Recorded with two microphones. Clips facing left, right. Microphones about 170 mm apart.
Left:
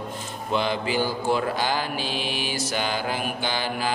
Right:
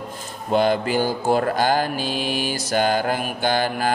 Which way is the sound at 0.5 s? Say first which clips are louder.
Right 6 dB; 45° right (ahead or behind).